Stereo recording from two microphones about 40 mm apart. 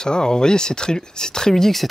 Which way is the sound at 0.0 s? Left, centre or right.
Centre.